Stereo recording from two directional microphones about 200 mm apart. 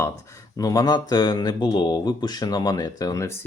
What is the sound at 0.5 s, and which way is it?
Speech, 20° left (ahead or behind).